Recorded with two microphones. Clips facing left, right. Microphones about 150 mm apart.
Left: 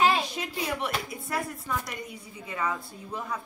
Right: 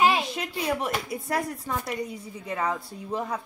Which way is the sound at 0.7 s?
40° right (ahead or behind).